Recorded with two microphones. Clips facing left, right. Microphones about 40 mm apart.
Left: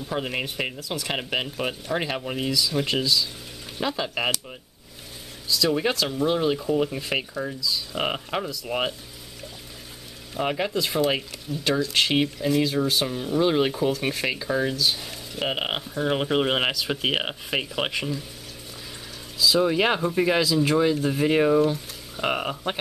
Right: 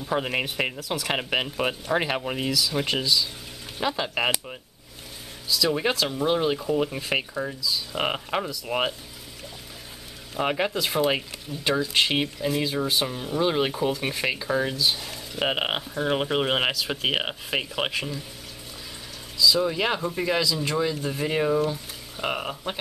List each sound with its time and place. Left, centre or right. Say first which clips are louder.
0.0 s speech: right 2 dB; centre
0.7 s speech: right 1 dB; centre
1.0 s speech: right 2 dB; centre
5.5 s speech: left 1 dB; centre
10.3 s speech: even; centre
19.4 s speech: left 2 dB; centre